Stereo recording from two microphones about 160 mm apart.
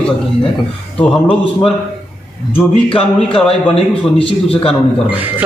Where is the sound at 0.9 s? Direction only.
10° left (ahead or behind).